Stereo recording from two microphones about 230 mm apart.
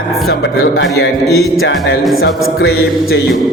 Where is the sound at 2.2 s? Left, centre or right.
Left.